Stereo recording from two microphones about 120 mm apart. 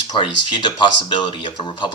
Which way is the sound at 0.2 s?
40° left (ahead or behind).